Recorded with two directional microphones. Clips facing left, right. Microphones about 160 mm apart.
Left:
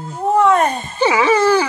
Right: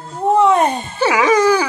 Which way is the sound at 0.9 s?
10° right (ahead or behind).